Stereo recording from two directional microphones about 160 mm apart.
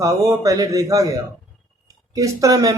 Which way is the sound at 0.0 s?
20° right (ahead or behind).